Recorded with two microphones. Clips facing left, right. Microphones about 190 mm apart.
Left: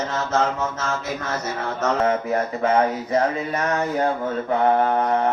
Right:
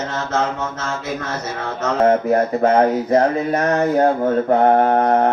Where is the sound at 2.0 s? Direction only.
40° right (ahead or behind).